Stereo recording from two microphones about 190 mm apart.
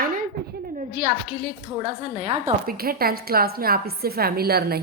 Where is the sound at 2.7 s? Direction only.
50° right (ahead or behind).